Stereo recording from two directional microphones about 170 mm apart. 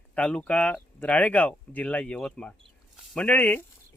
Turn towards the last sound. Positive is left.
turn(degrees=10)  # may be behind; listen again after turning